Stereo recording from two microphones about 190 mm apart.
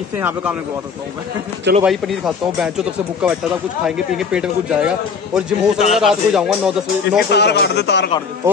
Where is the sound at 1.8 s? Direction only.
Centre (ahead or behind).